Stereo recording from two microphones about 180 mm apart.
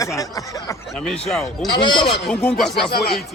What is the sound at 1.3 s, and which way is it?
A man's voice, centre (ahead or behind).